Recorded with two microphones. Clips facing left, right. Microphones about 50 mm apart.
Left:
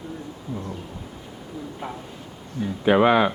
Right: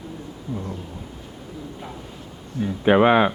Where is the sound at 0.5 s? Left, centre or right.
Centre.